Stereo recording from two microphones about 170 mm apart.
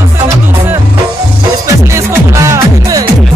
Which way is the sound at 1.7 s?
15° right (ahead or behind).